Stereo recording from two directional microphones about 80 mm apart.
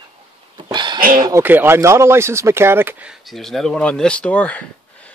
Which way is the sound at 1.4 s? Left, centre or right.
Right.